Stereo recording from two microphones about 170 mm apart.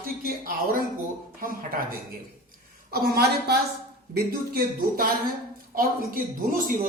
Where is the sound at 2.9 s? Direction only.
65° right (ahead or behind).